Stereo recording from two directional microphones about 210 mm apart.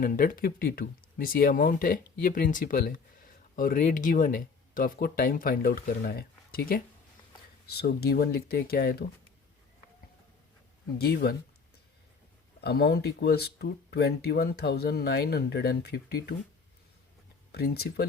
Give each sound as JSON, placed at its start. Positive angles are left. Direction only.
{"t": 0.0, "sound": "speech", "side_deg": 40}
{"t": 10.9, "sound": "speech", "side_deg": 50}
{"t": 12.6, "sound": "speech", "side_deg": 50}
{"t": 17.5, "sound": "speech", "side_deg": 50}